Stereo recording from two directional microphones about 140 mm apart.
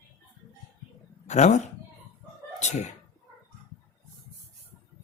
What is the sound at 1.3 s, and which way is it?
Speech, 55° left (ahead or behind).